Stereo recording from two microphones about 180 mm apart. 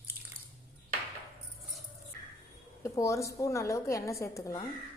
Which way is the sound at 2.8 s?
15° left (ahead or behind).